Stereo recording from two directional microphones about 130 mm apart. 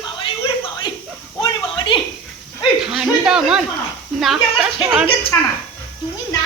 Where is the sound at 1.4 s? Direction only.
40° left (ahead or behind).